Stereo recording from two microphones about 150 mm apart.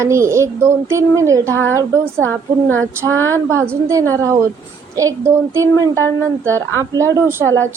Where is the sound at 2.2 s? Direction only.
10° left (ahead or behind).